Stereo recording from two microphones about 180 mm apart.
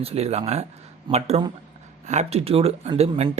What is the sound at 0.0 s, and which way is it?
Speech, 35° right (ahead or behind).